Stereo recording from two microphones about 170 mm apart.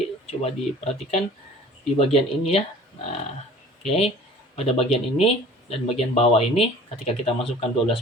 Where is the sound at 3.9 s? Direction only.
35° left (ahead or behind).